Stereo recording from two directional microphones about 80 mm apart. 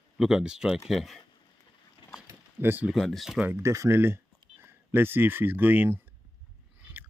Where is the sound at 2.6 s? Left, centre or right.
Right.